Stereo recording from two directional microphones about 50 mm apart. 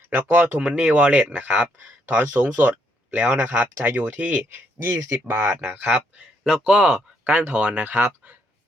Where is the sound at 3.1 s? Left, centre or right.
Right.